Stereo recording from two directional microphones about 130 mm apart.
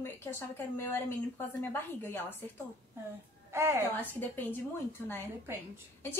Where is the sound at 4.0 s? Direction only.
15° left (ahead or behind).